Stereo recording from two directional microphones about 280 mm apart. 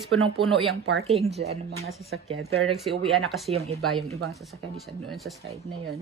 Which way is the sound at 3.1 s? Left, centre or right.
Centre.